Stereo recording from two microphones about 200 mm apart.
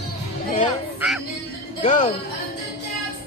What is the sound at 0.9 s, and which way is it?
Music, 5° right (ahead or behind).